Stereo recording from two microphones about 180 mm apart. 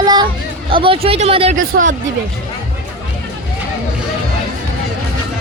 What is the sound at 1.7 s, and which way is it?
Speech, 90° right.